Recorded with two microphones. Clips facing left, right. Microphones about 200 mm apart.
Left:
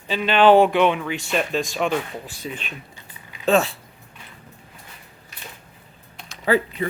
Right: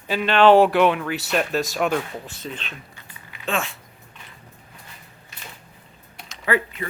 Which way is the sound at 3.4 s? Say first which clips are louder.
Left 8 dB; 35° left (ahead or behind).